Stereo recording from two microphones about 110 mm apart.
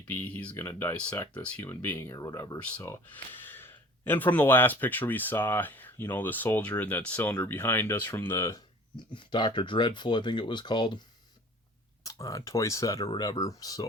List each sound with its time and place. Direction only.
0.0 s speech: 15° left (ahead or behind)
0.5 s speech: 25° left (ahead or behind)
1.3 s speech: 10° left (ahead or behind); by 2.6 s 30° left (ahead or behind)
2.6 s speech: 10° left (ahead or behind)
9.1 s speech: 45° left (ahead or behind)
12.0 s speech: 30° left (ahead or behind)